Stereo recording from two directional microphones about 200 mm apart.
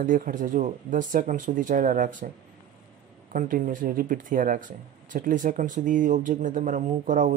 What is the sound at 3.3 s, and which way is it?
Speech, 40° right (ahead or behind).